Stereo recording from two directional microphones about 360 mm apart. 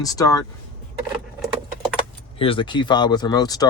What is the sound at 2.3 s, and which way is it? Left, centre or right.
Speech, centre.